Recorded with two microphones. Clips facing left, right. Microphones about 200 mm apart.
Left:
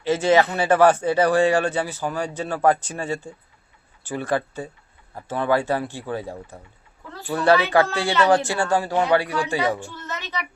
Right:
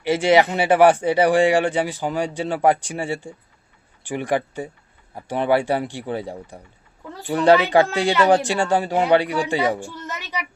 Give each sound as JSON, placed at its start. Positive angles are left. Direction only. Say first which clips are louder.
{"t": 0.0, "sound": "speech", "louder": "right 1 dB", "side_deg": -10}